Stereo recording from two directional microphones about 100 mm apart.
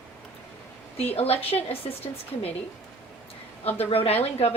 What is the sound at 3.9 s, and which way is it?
Speech, 75° left (ahead or behind).